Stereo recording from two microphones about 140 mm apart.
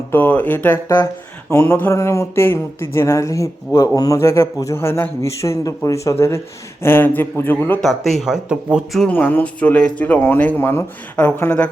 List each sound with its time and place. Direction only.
0.1 s speech: 15° left (ahead or behind)
7.8 s speech: centre (ahead or behind)